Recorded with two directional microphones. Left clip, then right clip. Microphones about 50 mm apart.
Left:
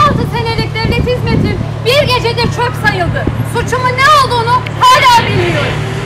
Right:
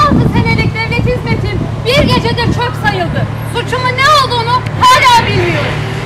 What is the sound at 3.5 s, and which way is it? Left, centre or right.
Speech, left.